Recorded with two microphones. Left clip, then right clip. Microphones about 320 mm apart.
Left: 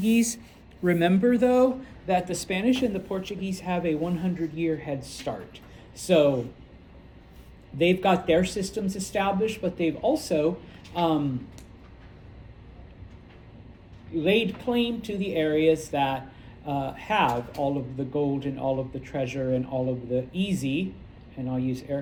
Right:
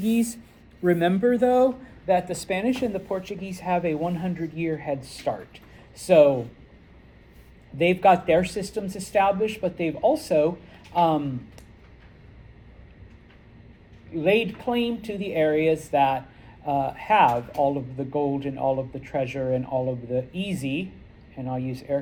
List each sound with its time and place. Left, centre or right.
0.0 s speech: centre
7.8 s speech: centre
14.2 s speech: centre